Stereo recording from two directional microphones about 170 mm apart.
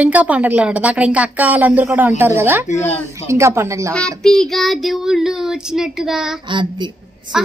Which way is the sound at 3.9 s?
5° left (ahead or behind).